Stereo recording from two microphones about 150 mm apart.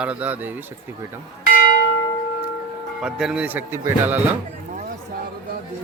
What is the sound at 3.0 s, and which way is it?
Speech, 5° right (ahead or behind).